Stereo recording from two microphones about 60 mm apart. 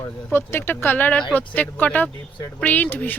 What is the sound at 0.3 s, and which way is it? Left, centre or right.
Speech, left.